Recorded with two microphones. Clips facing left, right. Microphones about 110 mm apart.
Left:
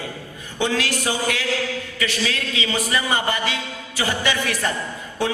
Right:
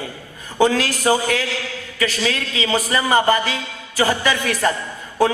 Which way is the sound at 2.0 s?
40° right (ahead or behind).